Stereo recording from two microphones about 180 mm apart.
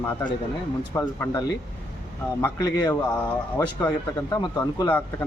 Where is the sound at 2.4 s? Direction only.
20° left (ahead or behind).